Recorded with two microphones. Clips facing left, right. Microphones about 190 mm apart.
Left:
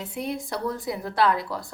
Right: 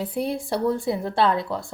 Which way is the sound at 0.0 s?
35° right (ahead or behind).